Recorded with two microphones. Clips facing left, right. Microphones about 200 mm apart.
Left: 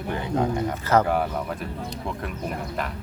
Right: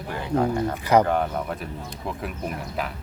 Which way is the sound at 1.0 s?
5° left (ahead or behind).